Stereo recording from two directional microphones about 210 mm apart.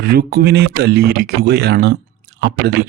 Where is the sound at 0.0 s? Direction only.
45° right (ahead or behind).